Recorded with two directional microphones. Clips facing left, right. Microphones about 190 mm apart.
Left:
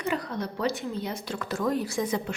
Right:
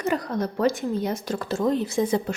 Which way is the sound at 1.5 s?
25° right (ahead or behind).